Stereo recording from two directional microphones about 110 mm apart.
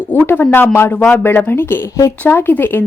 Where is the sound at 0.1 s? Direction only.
20° left (ahead or behind).